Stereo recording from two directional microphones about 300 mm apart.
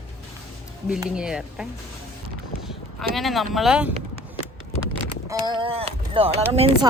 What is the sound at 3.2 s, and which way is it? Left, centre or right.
Speech, centre.